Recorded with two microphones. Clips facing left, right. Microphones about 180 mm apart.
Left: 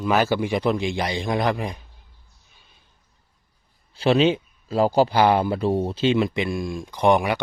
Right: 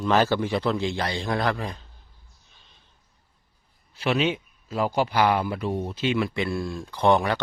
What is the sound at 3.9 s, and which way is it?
Speech, 30° left (ahead or behind).